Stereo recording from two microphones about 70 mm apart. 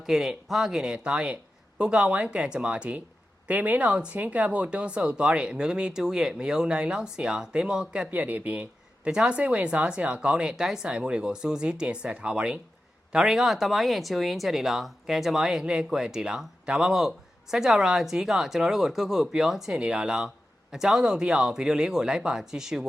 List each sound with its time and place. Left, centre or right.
0.0 s speech: centre
8.1 s speech: right; by 22.9 s centre